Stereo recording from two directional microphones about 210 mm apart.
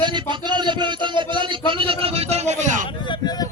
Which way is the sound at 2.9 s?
20° left (ahead or behind).